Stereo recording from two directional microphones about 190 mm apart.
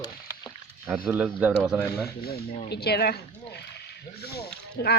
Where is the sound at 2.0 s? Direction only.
55° left (ahead or behind).